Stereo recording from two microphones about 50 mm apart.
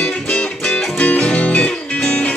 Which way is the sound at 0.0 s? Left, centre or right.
Centre.